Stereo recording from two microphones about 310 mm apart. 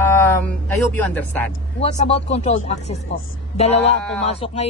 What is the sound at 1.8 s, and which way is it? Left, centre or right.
Speech, left.